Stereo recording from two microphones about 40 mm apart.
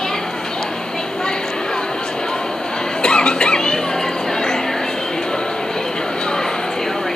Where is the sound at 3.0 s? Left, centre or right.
Left.